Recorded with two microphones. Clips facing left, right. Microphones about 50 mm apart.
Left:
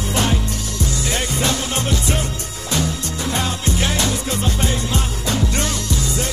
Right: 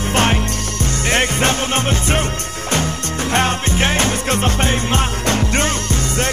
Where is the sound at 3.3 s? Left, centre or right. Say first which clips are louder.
Right 6 dB; right.